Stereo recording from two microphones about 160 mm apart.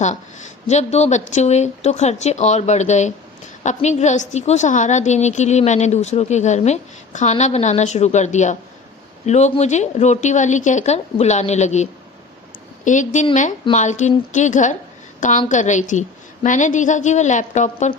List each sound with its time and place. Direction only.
0.7 s a woman's voice: 45° left (ahead or behind)